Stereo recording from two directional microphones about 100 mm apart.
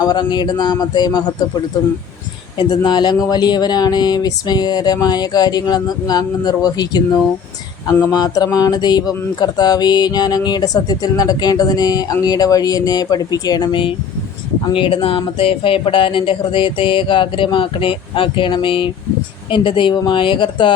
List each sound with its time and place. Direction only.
0.0 s speech: 45° left (ahead or behind)
2.6 s speech: 50° left (ahead or behind)